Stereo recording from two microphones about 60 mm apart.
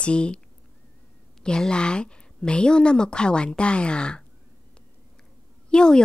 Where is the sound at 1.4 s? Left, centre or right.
Centre.